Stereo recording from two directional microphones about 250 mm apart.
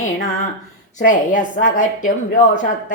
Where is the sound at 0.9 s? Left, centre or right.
Left.